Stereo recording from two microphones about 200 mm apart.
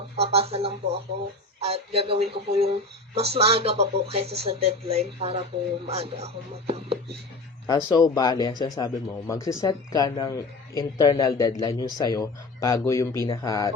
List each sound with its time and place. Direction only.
0.2 s speech: 30° right (ahead or behind)
7.9 s speech: 20° left (ahead or behind)